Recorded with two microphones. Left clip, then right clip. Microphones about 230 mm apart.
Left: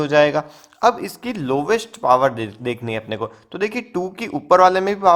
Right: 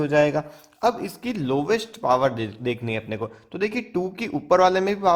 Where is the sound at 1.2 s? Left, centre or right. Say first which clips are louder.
Left 3 dB; left.